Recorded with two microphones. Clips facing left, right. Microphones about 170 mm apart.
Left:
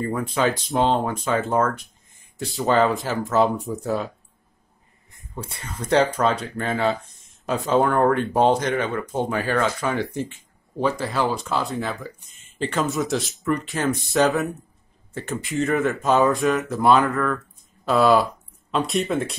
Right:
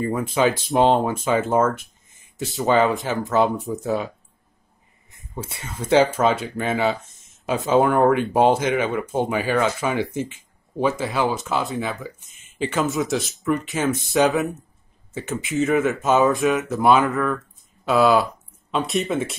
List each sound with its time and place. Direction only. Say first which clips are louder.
0.1 s speech: right 2 dB; 5° right (ahead or behind)
5.4 s speech: right 2 dB; 5° right (ahead or behind)